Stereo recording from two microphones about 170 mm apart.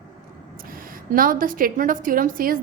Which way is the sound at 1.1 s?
55° right (ahead or behind).